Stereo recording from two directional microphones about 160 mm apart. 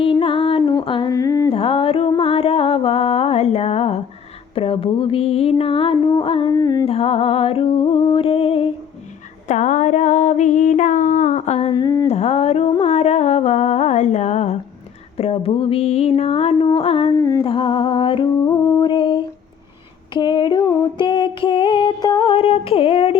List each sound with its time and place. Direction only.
0.0 s music: 35° left (ahead or behind)
1.5 s music: 35° left (ahead or behind)
4.5 s mantra: 35° left (ahead or behind)
6.5 s music: 20° left (ahead or behind)
6.8 s mantra: 35° left (ahead or behind)
9.5 s a sound: 50° left (ahead or behind)
11.7 s a sound: 25° left (ahead or behind)
12.0 s music: 40° left (ahead or behind)
12.8 s a sound: 45° left (ahead or behind)
15.2 s mantra: 35° left (ahead or behind)
17.2 s humming: 20° left (ahead or behind)
17.4 s music: 30° left (ahead or behind)
20.1 s a sound: 30° left (ahead or behind)